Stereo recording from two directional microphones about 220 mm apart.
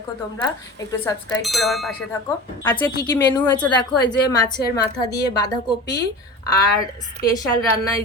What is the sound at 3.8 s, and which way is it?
A woman's voice, 20° left (ahead or behind).